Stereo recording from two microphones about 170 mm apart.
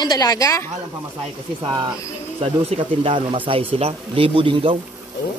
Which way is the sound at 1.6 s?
25° right (ahead or behind).